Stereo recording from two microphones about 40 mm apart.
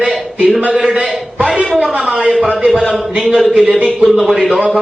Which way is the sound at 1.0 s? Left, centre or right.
Centre.